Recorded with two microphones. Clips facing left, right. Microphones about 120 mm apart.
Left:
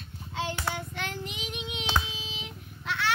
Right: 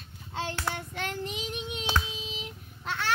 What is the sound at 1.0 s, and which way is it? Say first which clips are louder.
Child singing: right 2 dB; 40° right (ahead or behind).